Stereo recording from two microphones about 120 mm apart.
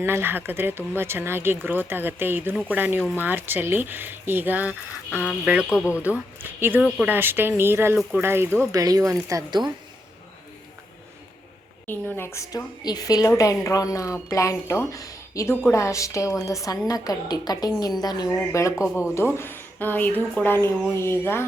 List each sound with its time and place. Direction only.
0.0 s speech: 20° right (ahead or behind); by 9.7 s 35° right (ahead or behind)
11.9 s a woman's voice: 20° left (ahead or behind)
14.9 s a sound: 25° left (ahead or behind)
15.6 s a woman's voice: 25° left (ahead or behind)